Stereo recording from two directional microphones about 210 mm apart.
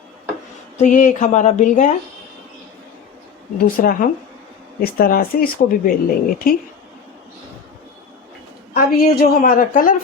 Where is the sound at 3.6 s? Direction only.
45° left (ahead or behind).